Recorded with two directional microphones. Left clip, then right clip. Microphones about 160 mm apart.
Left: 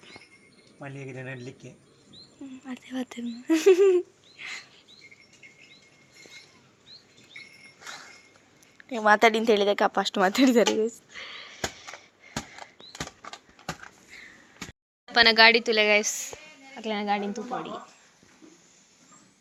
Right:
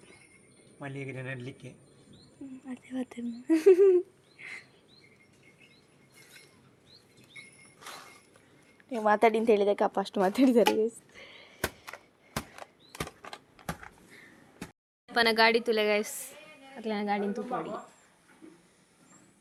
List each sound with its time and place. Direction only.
1.1 s speech: 20° right (ahead or behind)
2.6 s speech: 5° left (ahead or behind)
8.9 s a woman's voice: centre (ahead or behind)
13.2 s horse: 40° left (ahead or behind)
15.1 s a woman's voice: 5° left (ahead or behind)